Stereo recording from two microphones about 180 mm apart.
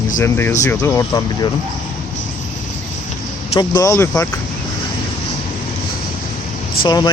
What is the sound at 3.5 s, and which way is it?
Speech, 25° left (ahead or behind).